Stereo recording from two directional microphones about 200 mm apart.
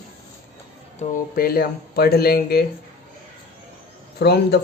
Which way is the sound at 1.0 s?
45° left (ahead or behind).